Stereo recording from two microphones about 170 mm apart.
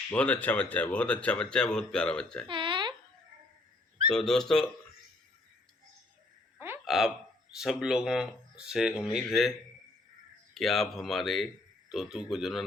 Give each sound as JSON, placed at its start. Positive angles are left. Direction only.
{"t": 0.1, "sound": "speech", "side_deg": 10}
{"t": 2.5, "sound": "a sound", "side_deg": -30}
{"t": 4.1, "sound": "speech", "side_deg": 0}
{"t": 6.8, "sound": "a sound", "side_deg": 0}
{"t": 7.5, "sound": "speech", "side_deg": -5}
{"t": 10.5, "sound": "speech", "side_deg": 0}